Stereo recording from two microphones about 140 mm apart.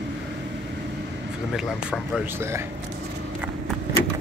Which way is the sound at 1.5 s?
5° right (ahead or behind).